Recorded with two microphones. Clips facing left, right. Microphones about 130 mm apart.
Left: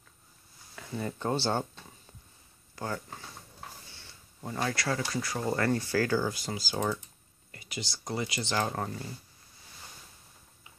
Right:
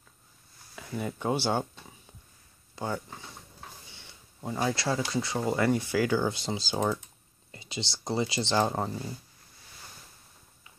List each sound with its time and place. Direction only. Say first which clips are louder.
0.7 s speech: right 1 dB; 15° right (ahead or behind)
3.9 s a sound: right 1 dB; 20° right (ahead or behind)
4.7 s speech: right 2 dB; 20° right (ahead or behind)
5.4 s speech: right 2 dB; 15° right (ahead or behind); by 8.7 s 30° right (ahead or behind)
8.7 s speech: right 3 dB; 20° right (ahead or behind)